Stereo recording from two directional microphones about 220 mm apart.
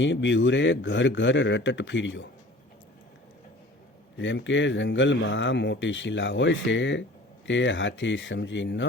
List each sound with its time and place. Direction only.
0.0 s speech: 55° left (ahead or behind)
4.2 s speech: 55° left (ahead or behind)